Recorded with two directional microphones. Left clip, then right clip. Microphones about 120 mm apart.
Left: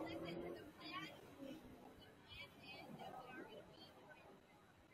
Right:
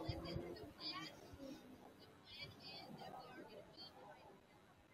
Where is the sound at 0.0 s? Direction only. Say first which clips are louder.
Left 1 dB; 25° left (ahead or behind).